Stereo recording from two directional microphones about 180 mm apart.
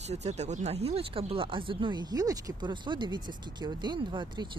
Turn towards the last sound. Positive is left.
turn(degrees=-25)  # may be behind; listen again after turning